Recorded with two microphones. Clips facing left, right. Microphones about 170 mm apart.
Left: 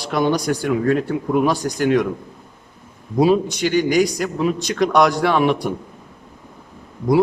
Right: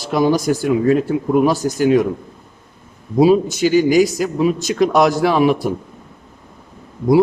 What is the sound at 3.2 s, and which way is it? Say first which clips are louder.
Speech: right 3 dB; 5° right (ahead or behind).